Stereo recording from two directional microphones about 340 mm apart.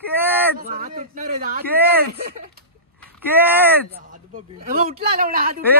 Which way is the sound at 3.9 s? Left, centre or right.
Right.